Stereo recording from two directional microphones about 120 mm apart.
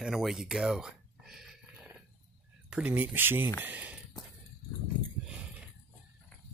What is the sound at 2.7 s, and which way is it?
Speech, 10° right (ahead or behind).